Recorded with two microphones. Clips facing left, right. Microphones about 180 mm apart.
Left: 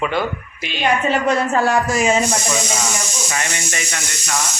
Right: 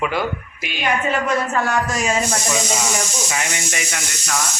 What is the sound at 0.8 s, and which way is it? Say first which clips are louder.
A woman's voice: left 3 dB; 30° left (ahead or behind).